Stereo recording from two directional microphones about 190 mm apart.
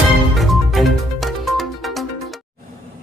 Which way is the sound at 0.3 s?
Centre (ahead or behind).